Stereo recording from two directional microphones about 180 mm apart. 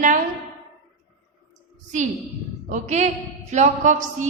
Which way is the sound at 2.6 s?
40° right (ahead or behind).